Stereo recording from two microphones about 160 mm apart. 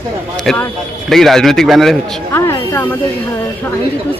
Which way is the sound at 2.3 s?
15° left (ahead or behind).